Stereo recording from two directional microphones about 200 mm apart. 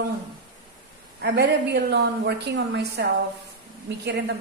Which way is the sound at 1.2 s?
55° right (ahead or behind).